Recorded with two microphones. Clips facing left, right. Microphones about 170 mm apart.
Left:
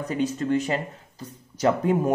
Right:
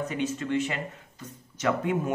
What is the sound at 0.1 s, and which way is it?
Speech, 40° left (ahead or behind).